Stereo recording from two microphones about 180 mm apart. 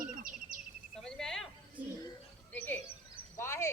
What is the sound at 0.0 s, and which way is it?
Bird, 50° right (ahead or behind).